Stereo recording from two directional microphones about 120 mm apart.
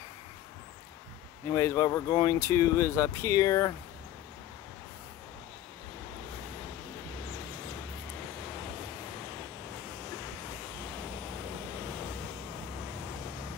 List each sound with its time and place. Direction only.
1.5 s speech: 25° left (ahead or behind)